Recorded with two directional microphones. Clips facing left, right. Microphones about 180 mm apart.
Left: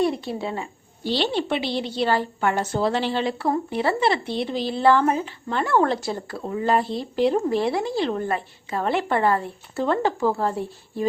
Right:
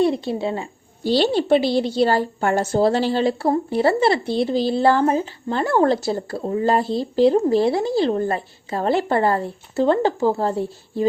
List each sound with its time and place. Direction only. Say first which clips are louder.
0.0 s a woman's voice: right 4 dB; 25° right (ahead or behind)